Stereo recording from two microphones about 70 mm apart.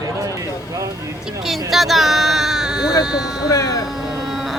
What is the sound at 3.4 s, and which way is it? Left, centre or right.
Speech, left.